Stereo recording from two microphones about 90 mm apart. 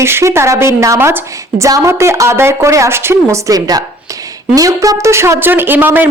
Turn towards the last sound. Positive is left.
turn(degrees=-20)  # may be behind; listen again after turning